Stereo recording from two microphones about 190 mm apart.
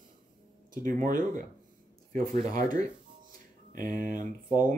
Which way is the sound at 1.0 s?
45° right (ahead or behind).